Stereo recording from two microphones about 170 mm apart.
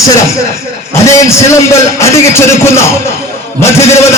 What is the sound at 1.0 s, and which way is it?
A man's voice, 15° left (ahead or behind).